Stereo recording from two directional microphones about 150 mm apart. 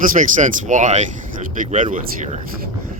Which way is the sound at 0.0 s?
60° right (ahead or behind).